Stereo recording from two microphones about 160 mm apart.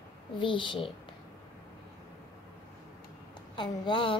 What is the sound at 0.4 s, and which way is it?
Speech, 30° left (ahead or behind).